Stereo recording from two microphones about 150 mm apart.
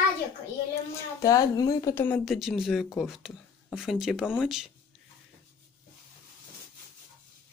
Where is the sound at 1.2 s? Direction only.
25° left (ahead or behind).